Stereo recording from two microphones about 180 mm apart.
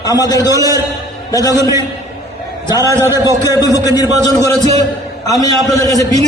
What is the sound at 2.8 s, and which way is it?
Speech, 15° right (ahead or behind).